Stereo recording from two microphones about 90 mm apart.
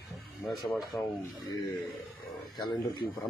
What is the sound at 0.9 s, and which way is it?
Speech, 30° left (ahead or behind).